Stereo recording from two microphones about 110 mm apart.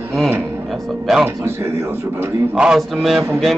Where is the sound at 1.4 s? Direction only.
20° right (ahead or behind).